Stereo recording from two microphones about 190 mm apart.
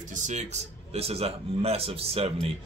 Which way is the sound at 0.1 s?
40° right (ahead or behind).